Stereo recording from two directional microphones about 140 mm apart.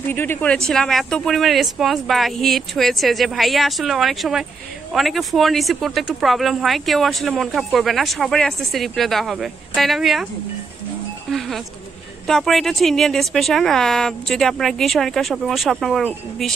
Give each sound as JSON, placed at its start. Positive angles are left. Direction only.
{"t": 0.1, "sound": "speech", "side_deg": 15}
{"t": 0.7, "sound": "speech", "side_deg": 5}
{"t": 11.2, "sound": "speech", "side_deg": 0}